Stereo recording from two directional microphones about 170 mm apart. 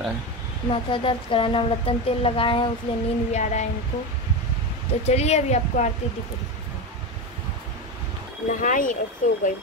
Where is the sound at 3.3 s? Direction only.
40° left (ahead or behind).